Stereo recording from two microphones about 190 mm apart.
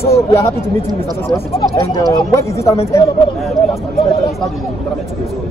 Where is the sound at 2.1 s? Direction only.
15° left (ahead or behind).